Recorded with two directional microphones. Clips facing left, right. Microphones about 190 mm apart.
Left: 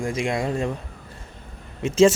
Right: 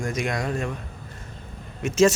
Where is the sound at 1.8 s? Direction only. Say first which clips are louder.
Left 3 dB; 30° left (ahead or behind).